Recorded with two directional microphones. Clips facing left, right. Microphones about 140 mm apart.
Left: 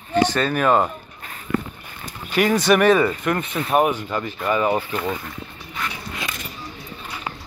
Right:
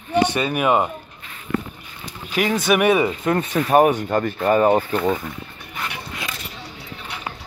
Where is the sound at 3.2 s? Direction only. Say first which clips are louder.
Right 3 dB; 35° right (ahead or behind).